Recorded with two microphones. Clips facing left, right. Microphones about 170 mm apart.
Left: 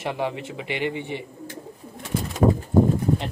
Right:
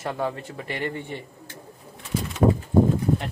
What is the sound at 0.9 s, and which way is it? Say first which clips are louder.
Speech: left 3 dB; 75° left (ahead or behind).